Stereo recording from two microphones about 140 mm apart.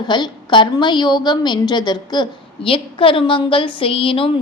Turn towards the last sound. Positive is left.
turn(degrees=40)  # may be behind; listen again after turning